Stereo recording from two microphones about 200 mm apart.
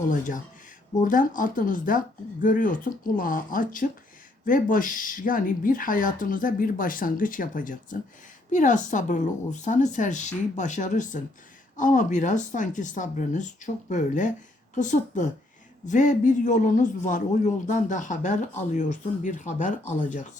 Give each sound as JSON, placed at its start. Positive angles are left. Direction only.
{"t": 0.1, "sound": "a man's voice", "side_deg": 40}